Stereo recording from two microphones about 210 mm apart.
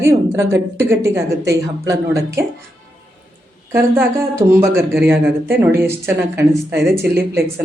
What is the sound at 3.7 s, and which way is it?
Speech, 10° right (ahead or behind).